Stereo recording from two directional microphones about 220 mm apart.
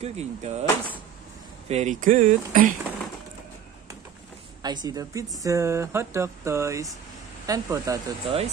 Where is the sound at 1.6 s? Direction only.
30° right (ahead or behind).